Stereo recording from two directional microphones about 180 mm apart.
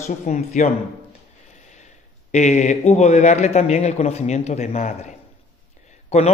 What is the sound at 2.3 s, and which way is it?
A man's voice, 40° left (ahead or behind).